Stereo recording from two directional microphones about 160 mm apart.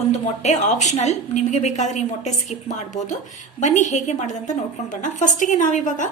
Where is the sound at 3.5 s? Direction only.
50° left (ahead or behind).